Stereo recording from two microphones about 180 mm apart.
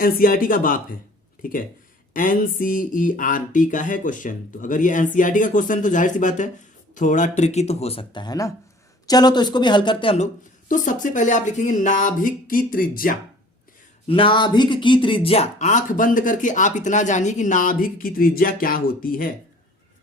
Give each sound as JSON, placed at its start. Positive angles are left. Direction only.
{"t": 0.0, "sound": "speech", "side_deg": 55}
{"t": 10.7, "sound": "speech", "side_deg": 45}
{"t": 14.1, "sound": "speech", "side_deg": 30}